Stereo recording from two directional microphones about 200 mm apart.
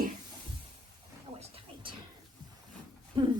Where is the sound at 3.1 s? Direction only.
25° right (ahead or behind).